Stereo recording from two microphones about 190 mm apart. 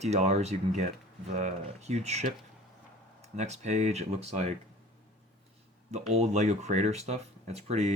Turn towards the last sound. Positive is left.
turn(degrees=-35)  # may be behind; listen again after turning